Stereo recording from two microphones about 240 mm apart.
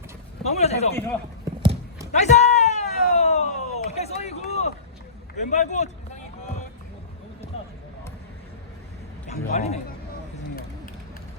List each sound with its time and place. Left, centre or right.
0.4 s a man's voice: left
0.9 s speech: centre
2.1 s a sound: left
3.8 s run: left
5.4 s a man's voice: left
9.2 s a man's voice: left